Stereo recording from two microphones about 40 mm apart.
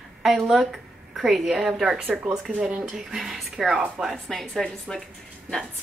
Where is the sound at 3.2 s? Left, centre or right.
Centre.